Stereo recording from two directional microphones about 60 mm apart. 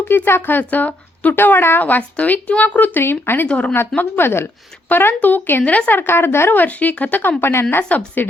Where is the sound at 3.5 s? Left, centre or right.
Left.